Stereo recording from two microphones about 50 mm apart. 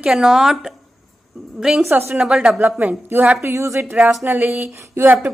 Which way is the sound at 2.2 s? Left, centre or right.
Centre.